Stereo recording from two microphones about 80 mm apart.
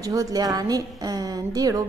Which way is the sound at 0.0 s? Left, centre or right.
Right.